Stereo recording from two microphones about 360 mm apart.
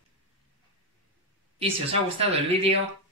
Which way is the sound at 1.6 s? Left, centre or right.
Centre.